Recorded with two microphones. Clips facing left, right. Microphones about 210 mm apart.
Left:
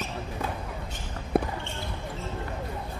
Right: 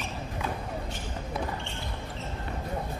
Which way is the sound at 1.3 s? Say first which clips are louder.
Left 9 dB; 55° left (ahead or behind).